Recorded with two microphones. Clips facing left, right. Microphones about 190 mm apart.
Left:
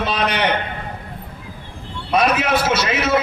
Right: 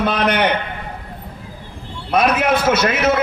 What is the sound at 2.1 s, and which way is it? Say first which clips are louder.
A man's voice: right 1 dB; 55° right (ahead or behind).